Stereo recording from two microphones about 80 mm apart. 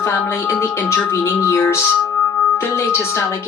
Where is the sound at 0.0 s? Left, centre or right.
Left.